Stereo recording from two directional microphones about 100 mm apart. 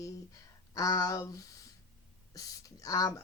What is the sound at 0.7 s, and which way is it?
Speech, 35° left (ahead or behind).